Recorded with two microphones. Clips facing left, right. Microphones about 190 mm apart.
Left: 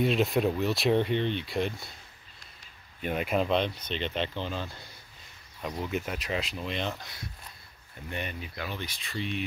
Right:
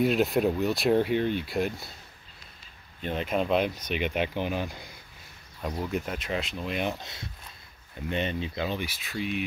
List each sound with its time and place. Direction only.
0.0 s speech: centre (ahead or behind)
3.0 s speech: 10° left (ahead or behind)
3.4 s speech: 5° right (ahead or behind)
5.6 s speech: centre (ahead or behind)
6.6 s speech: 10° right (ahead or behind)
8.8 s speech: 5° right (ahead or behind)